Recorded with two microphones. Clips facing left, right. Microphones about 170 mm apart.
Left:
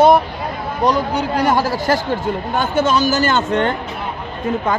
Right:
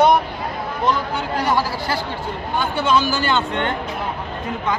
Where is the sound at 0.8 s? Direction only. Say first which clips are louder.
Left 5 dB; 40° left (ahead or behind).